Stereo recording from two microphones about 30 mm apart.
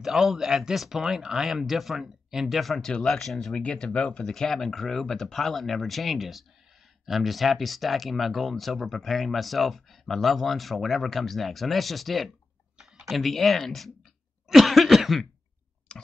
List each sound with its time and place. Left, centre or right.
0.0 s speech: centre
3.1 s speech: centre
3.8 s speech: left
4.3 s speech: centre
14.5 s cough: centre
15.9 s clicking: left